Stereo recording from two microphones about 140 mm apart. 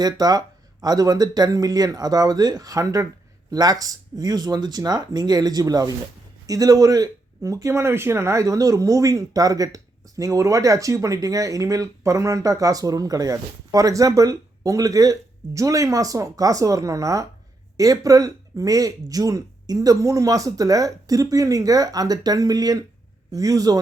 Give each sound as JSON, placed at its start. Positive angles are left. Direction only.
{"t": 0.0, "sound": "speech", "side_deg": -30}